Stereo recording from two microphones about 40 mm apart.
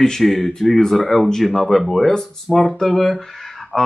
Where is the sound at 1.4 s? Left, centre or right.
Centre.